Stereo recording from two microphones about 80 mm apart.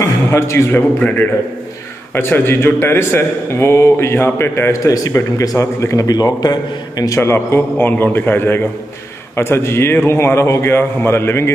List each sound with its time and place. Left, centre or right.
0.0 s a sound: left
0.7 s a man's voice: left
4.7 s a man's voice: left
6.0 s a man's voice: left
7.2 s a man's voice: left